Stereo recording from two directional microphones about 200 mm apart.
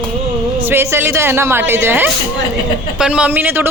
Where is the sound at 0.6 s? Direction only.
10° right (ahead or behind).